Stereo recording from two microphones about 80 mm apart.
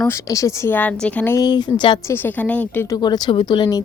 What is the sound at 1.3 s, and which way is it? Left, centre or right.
Speech, left.